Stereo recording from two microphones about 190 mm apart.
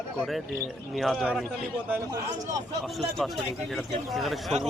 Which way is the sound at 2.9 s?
Centre (ahead or behind).